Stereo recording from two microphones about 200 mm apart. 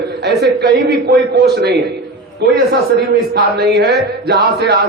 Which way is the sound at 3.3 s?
55° right (ahead or behind).